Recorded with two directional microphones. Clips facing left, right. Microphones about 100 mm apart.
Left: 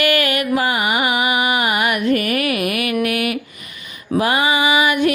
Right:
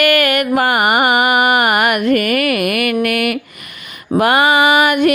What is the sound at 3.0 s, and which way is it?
Speech, 60° right (ahead or behind).